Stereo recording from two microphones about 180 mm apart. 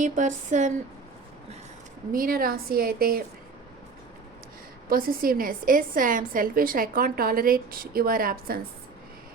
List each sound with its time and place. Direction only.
0.0 s a woman's voice: 45° right (ahead or behind)
2.1 s a woman's voice: 50° right (ahead or behind)
4.9 s a woman's voice: 55° right (ahead or behind)